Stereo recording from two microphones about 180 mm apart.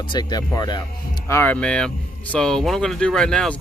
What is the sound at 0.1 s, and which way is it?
Speech, 20° left (ahead or behind).